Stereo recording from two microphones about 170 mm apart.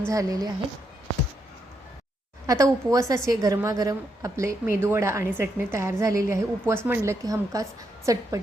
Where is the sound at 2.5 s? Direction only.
20° right (ahead or behind).